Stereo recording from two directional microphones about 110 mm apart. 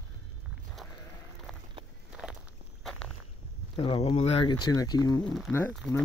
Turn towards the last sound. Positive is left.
turn(degrees=15)  # may be behind; listen again after turning